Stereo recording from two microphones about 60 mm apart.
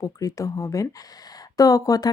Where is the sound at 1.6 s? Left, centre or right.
Left.